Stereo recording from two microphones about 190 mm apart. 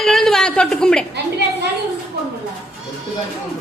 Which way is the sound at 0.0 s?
Centre (ahead or behind).